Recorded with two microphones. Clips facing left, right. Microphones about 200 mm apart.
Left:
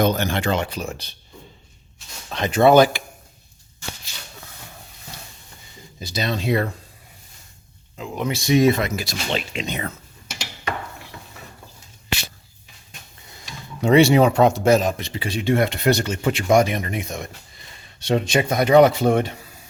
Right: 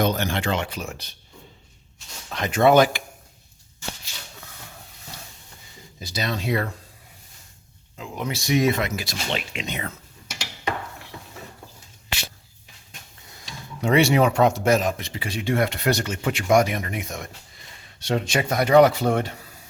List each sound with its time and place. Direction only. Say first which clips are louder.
0.0 s speech: left 3 dB; 50° left (ahead or behind); by 1.1 s 35° left (ahead or behind)
2.3 s speech: left 3 dB; 30° left (ahead or behind)
6.0 s speech: left 3 dB; 25° left (ahead or behind)
7.9 s speech: left 4 dB; 20° left (ahead or behind); by 9.9 s 40° left (ahead or behind)
13.8 s speech: left 4 dB; 30° left (ahead or behind)